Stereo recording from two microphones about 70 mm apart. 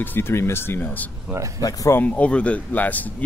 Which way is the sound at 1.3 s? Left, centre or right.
Right.